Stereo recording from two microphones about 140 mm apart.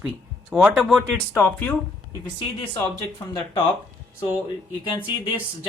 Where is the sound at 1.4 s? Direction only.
15° left (ahead or behind).